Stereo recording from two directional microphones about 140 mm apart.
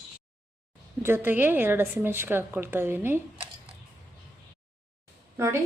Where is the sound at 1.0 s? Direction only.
15° right (ahead or behind).